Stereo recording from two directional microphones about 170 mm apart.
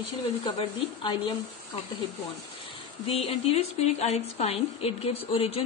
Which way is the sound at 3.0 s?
35° left (ahead or behind).